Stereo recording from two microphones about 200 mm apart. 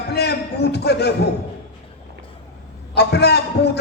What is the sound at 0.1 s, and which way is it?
Speech, 55° left (ahead or behind).